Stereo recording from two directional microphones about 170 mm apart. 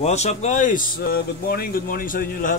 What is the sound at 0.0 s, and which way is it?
Speech, 40° left (ahead or behind).